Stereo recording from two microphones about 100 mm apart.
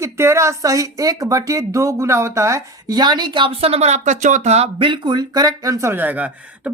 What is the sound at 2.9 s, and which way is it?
Speech, 45° right (ahead or behind).